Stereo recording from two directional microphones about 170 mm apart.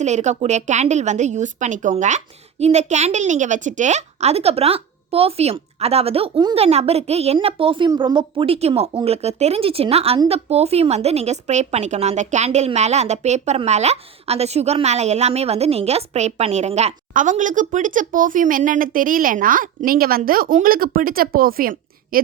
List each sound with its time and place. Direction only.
0.0 s a woman's voice: 45° right (ahead or behind); by 22.2 s 60° right (ahead or behind)